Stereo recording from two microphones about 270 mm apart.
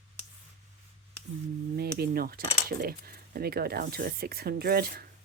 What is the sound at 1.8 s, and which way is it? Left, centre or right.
Speech, right.